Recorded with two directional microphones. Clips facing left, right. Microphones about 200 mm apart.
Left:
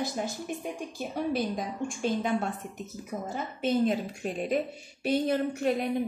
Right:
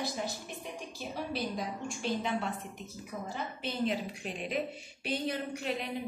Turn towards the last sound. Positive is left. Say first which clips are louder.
# left 8 dB
turn(degrees=50)  # may be behind; listen again after turning